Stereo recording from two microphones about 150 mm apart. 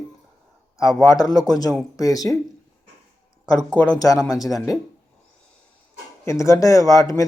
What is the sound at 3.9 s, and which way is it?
Speech, 25° left (ahead or behind).